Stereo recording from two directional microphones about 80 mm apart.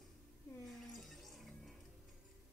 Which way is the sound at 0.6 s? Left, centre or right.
Centre.